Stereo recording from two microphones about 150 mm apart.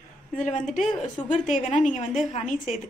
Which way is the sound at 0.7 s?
Centre (ahead or behind).